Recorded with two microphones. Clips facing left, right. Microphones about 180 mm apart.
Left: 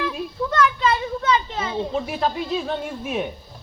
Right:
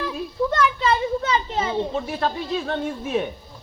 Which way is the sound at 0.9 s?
35° right (ahead or behind).